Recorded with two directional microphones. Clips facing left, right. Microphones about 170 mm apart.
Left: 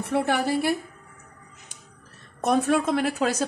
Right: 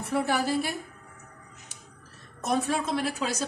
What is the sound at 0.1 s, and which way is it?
Speech, 60° left (ahead or behind).